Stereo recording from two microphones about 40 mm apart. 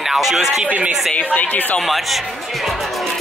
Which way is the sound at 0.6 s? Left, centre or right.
Right.